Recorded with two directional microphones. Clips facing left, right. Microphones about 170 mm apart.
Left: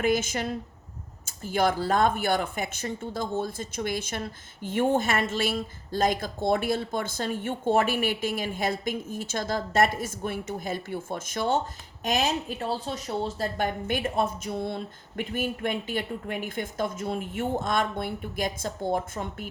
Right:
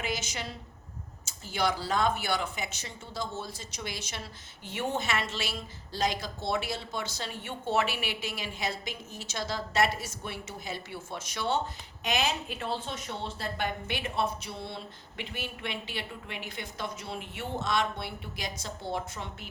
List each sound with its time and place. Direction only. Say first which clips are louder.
0.0 s speech: left 10 dB; 50° left (ahead or behind)